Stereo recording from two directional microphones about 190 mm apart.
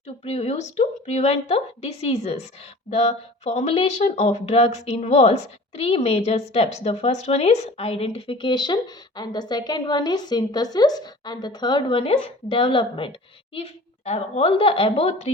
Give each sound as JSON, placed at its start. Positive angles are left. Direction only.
{"t": 0.3, "sound": "speech", "side_deg": 35}